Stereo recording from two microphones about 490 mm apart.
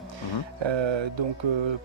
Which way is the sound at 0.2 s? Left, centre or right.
Right.